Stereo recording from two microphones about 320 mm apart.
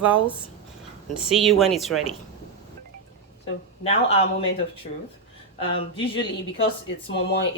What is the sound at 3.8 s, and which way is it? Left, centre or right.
Speech, centre.